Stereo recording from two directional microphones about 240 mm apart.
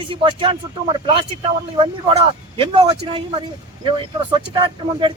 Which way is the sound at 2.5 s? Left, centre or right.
Right.